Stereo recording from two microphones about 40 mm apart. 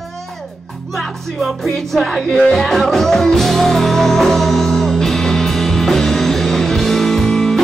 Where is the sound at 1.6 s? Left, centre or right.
Centre.